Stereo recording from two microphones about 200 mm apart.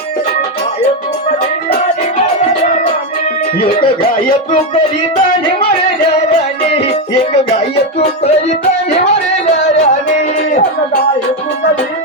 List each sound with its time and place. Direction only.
6.7 s music: 30° left (ahead or behind)
9.7 s music: 35° left (ahead or behind)